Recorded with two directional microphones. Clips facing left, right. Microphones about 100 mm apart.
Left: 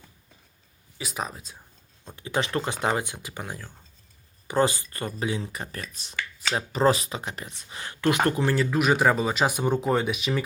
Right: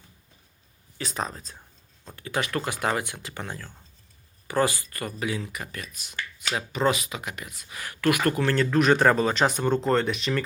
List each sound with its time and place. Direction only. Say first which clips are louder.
0.9 s speech: right 1 dB; 5° left (ahead or behind)
2.0 s speech: left 1 dB; 20° left (ahead or behind)
8.4 s speech: right 2 dB; 5° left (ahead or behind)